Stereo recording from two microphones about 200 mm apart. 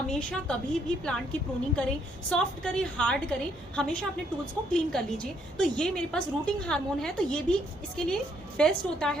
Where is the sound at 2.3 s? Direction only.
5° left (ahead or behind).